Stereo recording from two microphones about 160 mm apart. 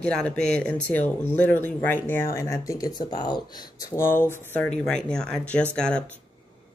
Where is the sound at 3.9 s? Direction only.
15° left (ahead or behind).